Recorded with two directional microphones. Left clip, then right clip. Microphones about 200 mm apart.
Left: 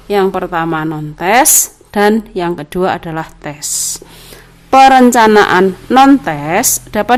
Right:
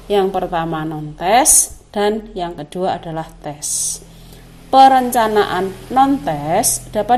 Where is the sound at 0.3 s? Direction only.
15° left (ahead or behind).